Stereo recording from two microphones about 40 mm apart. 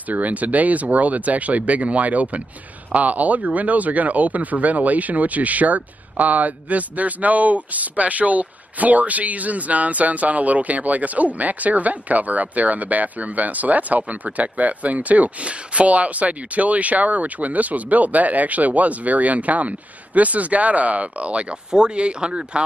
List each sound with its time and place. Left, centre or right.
0.1 s speech: right